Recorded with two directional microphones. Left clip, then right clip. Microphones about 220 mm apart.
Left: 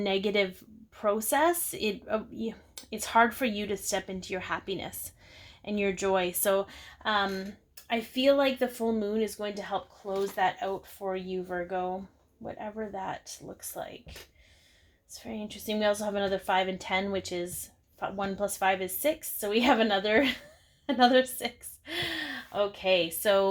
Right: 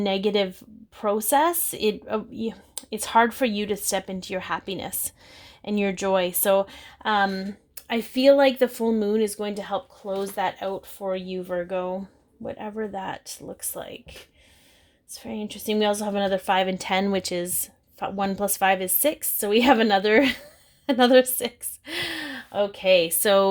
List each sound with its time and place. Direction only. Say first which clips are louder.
0.0 s a woman's voice: right 4 dB; 40° right (ahead or behind)
15.1 s a woman's voice: right 6 dB; 45° right (ahead or behind)